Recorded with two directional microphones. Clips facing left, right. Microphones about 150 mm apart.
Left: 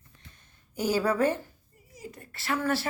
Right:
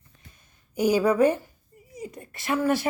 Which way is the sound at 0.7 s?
15° right (ahead or behind).